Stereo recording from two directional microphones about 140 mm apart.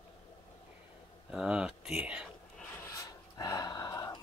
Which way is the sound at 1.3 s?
5° right (ahead or behind).